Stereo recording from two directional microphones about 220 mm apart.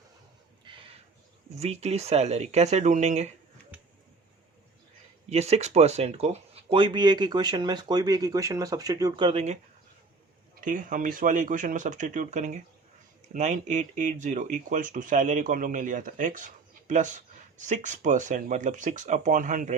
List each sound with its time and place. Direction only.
0.6 s a sound: 20° right (ahead or behind)
1.5 s speech: 30° right (ahead or behind)
5.3 s speech: 30° right (ahead or behind)